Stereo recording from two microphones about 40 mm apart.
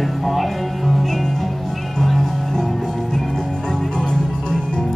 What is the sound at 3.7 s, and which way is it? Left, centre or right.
Music, left.